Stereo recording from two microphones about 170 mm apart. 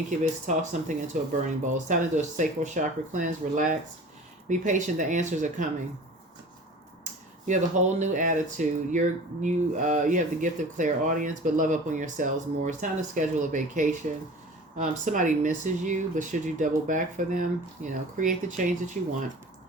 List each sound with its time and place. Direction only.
0.1 s speech: 45° right (ahead or behind)
7.0 s speech: 45° right (ahead or behind)